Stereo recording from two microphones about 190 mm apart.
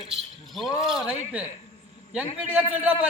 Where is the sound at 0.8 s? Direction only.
Centre (ahead or behind).